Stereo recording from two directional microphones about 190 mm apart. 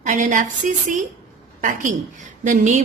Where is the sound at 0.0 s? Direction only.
40° right (ahead or behind).